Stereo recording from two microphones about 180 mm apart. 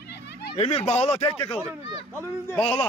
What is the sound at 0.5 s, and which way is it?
Speech, 35° left (ahead or behind).